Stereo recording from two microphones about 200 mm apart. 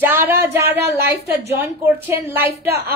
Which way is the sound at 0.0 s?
10° right (ahead or behind).